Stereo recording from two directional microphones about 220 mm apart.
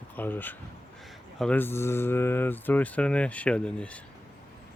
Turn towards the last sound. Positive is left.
turn(degrees=5)  # may be behind; listen again after turning